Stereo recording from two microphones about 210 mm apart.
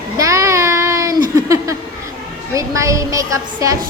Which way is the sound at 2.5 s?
15° right (ahead or behind).